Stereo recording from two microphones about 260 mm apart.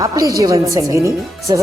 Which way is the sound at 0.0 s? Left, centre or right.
Centre.